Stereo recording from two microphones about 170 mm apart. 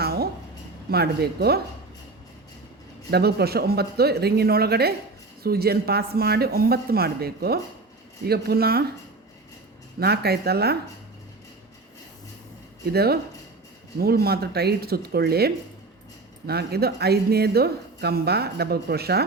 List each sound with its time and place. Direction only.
0.0 s a sound: 65° right (ahead or behind)
0.9 s speech: 70° right (ahead or behind)
3.1 s speech: 70° right (ahead or behind)
10.0 s speech: 70° right (ahead or behind)
12.9 s speech: 65° right (ahead or behind)